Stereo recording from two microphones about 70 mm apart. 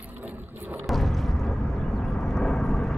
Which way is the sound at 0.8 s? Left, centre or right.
Centre.